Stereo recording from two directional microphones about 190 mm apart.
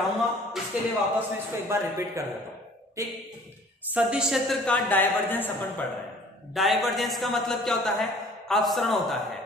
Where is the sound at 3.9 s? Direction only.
5° right (ahead or behind); by 5.7 s 10° left (ahead or behind).